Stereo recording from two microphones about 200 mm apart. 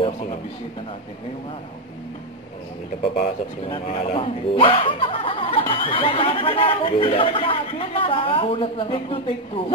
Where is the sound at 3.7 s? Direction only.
30° left (ahead or behind).